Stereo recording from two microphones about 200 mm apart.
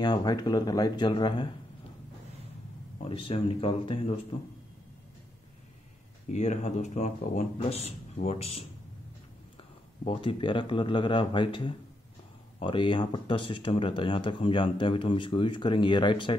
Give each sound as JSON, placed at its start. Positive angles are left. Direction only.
{"t": 0.0, "sound": "speech", "side_deg": 20}
{"t": 3.0, "sound": "speech", "side_deg": 25}
{"t": 6.2, "sound": "speech", "side_deg": 35}
{"t": 10.0, "sound": "speech", "side_deg": 25}